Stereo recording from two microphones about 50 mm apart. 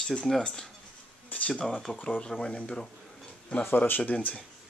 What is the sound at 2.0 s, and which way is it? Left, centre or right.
Speech, left.